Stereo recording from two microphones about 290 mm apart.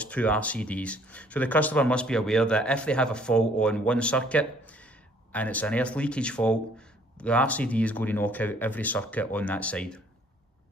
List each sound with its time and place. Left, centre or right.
0.0 s speech: centre